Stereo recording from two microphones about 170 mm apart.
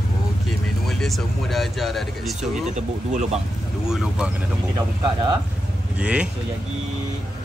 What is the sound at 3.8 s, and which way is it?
Speech, 5° right (ahead or behind).